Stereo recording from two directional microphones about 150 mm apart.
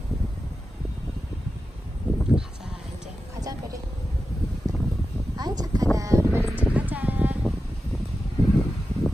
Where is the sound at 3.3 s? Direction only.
25° right (ahead or behind).